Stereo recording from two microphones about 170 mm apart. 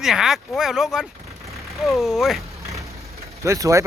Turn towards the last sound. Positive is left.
turn(degrees=-20)  # may be behind; listen again after turning